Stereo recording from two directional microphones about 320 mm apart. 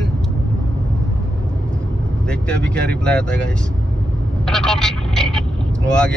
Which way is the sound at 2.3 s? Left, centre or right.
Centre.